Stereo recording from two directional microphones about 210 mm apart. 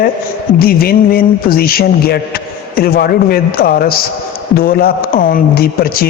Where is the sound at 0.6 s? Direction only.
45° left (ahead or behind).